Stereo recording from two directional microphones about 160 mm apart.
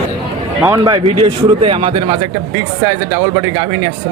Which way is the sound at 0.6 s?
25° right (ahead or behind).